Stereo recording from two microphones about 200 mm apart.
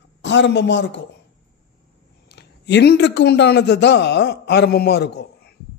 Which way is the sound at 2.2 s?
60° left (ahead or behind).